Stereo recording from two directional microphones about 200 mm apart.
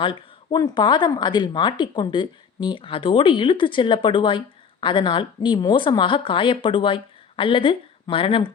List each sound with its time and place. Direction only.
0.0 s speech: 20° left (ahead or behind)